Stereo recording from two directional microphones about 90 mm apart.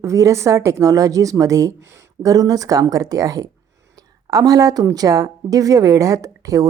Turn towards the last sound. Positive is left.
turn(degrees=-40)  # may be behind; listen again after turning